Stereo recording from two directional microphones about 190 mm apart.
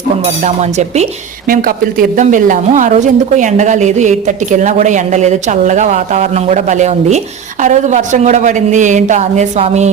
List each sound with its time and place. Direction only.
0.4 s a woman's voice: 35° right (ahead or behind)
1.5 s a woman's voice: 50° right (ahead or behind)